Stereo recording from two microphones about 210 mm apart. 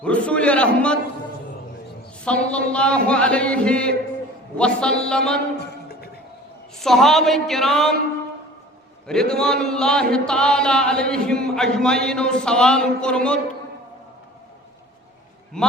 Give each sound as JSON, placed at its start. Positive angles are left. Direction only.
{"t": 0.0, "sound": "chant", "side_deg": 5}
{"t": 2.2, "sound": "chant", "side_deg": 5}
{"t": 5.5, "sound": "a sound", "side_deg": 50}
{"t": 6.7, "sound": "chant", "side_deg": 0}
{"t": 9.3, "sound": "chant", "side_deg": 5}
{"t": 15.6, "sound": "chant", "side_deg": 5}